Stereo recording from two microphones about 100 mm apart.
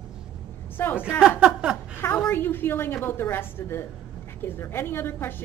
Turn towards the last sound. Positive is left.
turn(degrees=20)  # may be behind; listen again after turning